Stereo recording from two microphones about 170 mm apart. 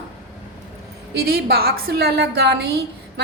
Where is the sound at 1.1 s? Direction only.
65° right (ahead or behind).